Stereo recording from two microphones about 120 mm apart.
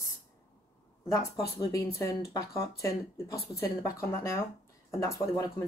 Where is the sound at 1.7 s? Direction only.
30° left (ahead or behind).